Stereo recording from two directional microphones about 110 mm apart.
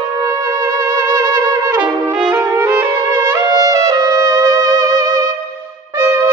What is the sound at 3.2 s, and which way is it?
Music, 25° right (ahead or behind).